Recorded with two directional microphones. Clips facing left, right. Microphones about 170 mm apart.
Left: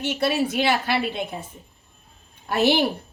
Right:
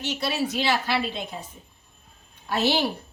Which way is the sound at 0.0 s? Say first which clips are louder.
Left 4 dB; 55° left (ahead or behind).